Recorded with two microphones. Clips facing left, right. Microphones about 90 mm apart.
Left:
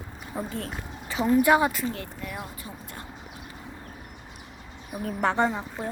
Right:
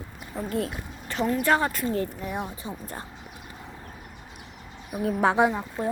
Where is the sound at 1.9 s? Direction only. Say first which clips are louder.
Right 7 dB; 30° right (ahead or behind).